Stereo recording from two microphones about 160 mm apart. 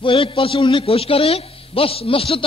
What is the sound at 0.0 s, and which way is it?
A man's voice, 35° left (ahead or behind).